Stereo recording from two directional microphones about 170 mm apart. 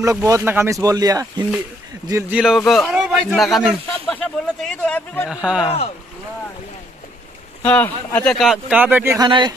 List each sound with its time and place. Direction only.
0.0 s speech: 20° right (ahead or behind)
2.3 s speech: centre (ahead or behind)
3.5 s a sound: 5° left (ahead or behind)
5.3 s speech: 5° right (ahead or behind)
7.6 s speech: 10° left (ahead or behind); by 9.2 s 10° right (ahead or behind)
9.2 s speech: 25° right (ahead or behind)